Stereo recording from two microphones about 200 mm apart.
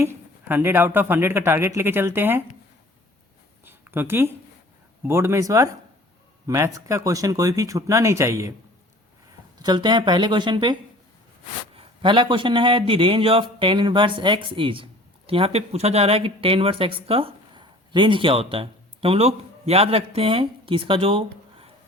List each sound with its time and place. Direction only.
0.0 s speech: 10° right (ahead or behind)
3.6 s a sound: 10° right (ahead or behind)
5.0 s speech: 10° right (ahead or behind)
9.6 s a man's voice: 20° right (ahead or behind)
11.8 s a man's voice: 25° right (ahead or behind)